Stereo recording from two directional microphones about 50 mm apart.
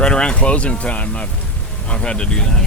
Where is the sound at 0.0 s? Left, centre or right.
Centre.